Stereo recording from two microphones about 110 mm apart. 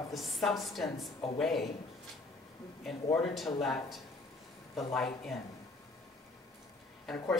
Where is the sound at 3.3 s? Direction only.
Centre (ahead or behind).